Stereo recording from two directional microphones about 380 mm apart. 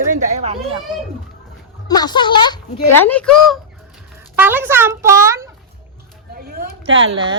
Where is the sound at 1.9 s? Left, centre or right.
Centre.